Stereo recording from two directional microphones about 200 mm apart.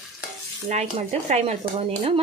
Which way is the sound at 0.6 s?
35° right (ahead or behind).